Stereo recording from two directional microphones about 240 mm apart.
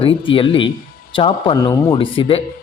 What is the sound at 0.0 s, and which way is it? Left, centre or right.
A man's voice, left.